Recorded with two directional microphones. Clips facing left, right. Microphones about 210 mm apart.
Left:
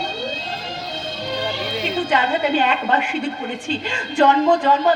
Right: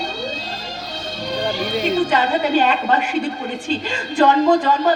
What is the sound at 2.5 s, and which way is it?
Mantra, 40° right (ahead or behind).